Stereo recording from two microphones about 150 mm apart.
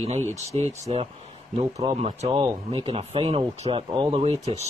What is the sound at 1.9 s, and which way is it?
Speech, 45° right (ahead or behind).